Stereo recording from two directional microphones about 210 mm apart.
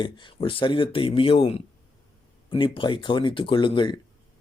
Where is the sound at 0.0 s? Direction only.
20° left (ahead or behind).